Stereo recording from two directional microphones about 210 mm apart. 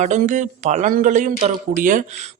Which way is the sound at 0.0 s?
35° right (ahead or behind).